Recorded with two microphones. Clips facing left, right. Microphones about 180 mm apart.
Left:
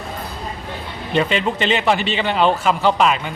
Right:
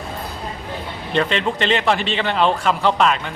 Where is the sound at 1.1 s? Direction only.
5° left (ahead or behind).